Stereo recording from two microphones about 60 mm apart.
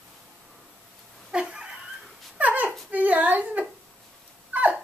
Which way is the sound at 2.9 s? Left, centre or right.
Right.